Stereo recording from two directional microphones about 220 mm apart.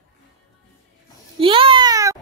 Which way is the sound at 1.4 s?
25° right (ahead or behind).